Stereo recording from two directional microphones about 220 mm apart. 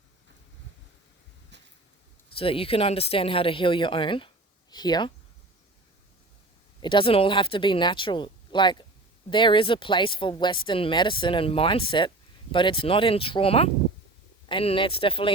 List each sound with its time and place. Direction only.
2.4 s speech: 25° left (ahead or behind)
6.8 s speech: 25° left (ahead or behind)